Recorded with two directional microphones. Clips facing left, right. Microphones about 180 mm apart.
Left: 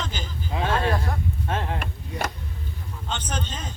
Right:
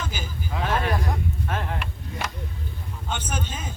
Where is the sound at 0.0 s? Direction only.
10° right (ahead or behind).